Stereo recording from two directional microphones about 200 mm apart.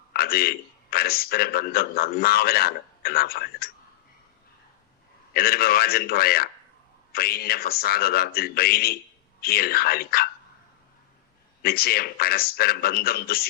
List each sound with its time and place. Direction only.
0.1 s a man's voice: 50° left (ahead or behind)
5.3 s a man's voice: 50° left (ahead or behind)
11.6 s a man's voice: 50° left (ahead or behind)